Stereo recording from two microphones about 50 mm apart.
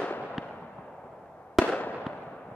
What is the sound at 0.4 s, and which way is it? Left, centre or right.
Fireworks, centre.